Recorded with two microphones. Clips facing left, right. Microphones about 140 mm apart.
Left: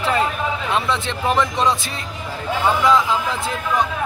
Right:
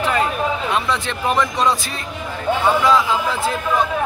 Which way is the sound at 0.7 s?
25° left (ahead or behind).